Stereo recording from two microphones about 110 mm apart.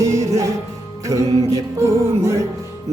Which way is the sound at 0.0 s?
30° right (ahead or behind).